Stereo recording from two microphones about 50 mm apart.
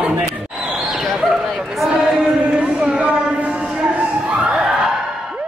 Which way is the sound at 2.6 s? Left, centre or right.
Right.